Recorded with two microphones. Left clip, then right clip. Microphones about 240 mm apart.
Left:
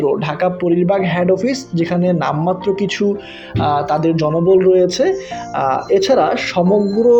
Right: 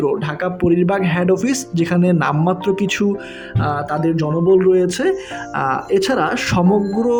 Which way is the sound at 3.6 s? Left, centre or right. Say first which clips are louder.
Left 5 dB; centre.